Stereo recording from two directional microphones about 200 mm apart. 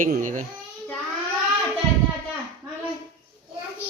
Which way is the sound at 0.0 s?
40° right (ahead or behind).